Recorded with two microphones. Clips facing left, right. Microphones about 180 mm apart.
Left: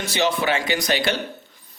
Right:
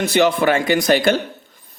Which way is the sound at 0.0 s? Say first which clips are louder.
Right 7 dB; 55° right (ahead or behind).